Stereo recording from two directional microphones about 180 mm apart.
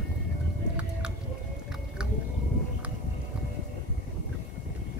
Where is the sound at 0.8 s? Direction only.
5° right (ahead or behind).